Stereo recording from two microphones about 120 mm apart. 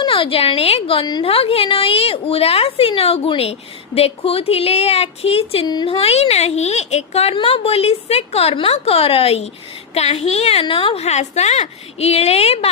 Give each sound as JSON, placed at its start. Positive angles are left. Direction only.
{"t": 0.0, "sound": "a woman's voice", "side_deg": 45}
{"t": 5.6, "sound": "a woman's voice", "side_deg": 35}
{"t": 5.9, "sound": "a woman's voice", "side_deg": 55}